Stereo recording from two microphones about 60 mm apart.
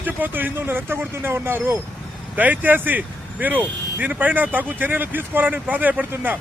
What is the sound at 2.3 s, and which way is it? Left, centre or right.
Speech, right.